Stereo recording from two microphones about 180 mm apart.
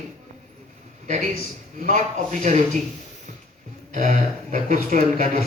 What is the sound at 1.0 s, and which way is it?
A man's voice, 40° right (ahead or behind).